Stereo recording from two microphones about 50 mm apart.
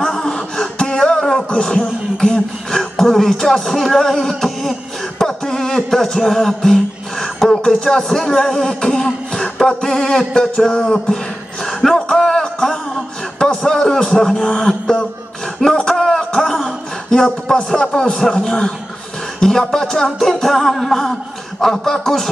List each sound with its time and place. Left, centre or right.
0.0 s a sound: centre
0.6 s beatboxing: centre
2.1 s music: centre
7.4 s speech: centre
8.3 s vocal music: centre
10.8 s music: centre
11.8 s a sound: centre
14.0 s speech: centre
16.0 s a sound: centre
17.7 s music: centre